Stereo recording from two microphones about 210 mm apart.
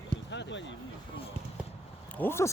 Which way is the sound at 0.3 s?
60° left (ahead or behind).